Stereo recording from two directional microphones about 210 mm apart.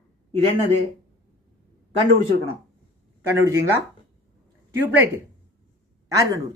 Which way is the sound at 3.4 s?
15° right (ahead or behind).